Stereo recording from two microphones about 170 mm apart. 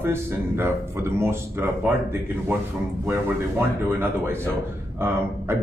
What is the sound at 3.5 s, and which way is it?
Speech, 15° right (ahead or behind).